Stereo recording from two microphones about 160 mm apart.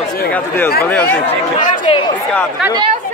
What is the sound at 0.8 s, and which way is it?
Speech, 10° left (ahead or behind).